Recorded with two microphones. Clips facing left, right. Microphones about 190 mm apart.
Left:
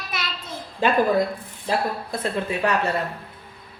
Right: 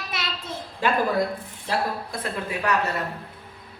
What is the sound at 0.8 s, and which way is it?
Speech, 20° left (ahead or behind).